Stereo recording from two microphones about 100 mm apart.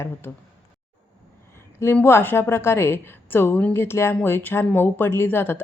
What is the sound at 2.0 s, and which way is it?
A woman's voice, 25° left (ahead or behind).